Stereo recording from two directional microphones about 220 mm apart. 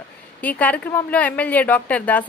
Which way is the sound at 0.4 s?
5° left (ahead or behind).